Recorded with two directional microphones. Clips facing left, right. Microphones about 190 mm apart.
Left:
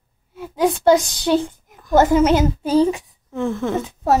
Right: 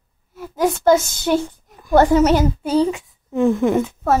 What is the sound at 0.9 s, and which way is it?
Speech, 15° left (ahead or behind).